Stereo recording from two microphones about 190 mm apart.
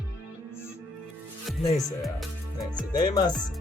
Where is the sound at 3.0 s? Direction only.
20° left (ahead or behind).